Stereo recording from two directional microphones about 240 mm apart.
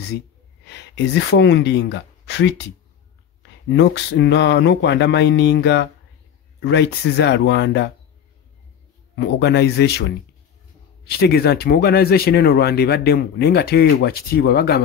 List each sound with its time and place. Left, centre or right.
0.7 s speech: left
3.7 s speech: left
9.1 s speech: left